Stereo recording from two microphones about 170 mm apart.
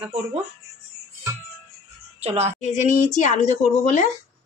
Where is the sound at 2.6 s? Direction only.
45° left (ahead or behind).